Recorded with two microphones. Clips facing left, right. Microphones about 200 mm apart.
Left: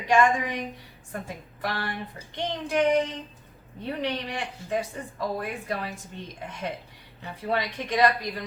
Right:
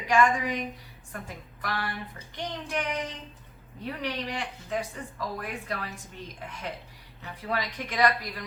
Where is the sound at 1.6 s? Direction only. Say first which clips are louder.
Left 2 dB; 25° left (ahead or behind).